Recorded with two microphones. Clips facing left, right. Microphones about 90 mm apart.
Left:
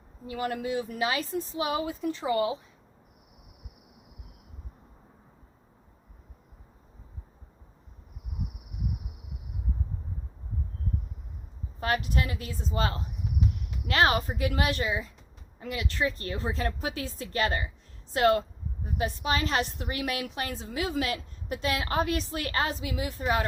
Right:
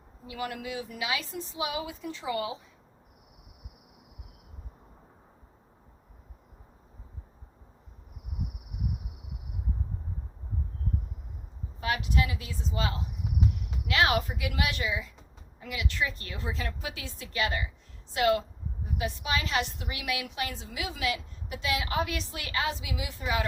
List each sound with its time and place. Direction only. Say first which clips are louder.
0.3 s a woman's voice: left 5 dB; 40° left (ahead or behind)
11.8 s a woman's voice: left 1 dB; 40° left (ahead or behind)